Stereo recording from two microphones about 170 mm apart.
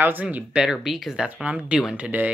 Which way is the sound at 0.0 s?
10° right (ahead or behind).